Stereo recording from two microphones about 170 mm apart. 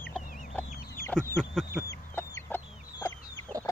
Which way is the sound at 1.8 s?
15° left (ahead or behind).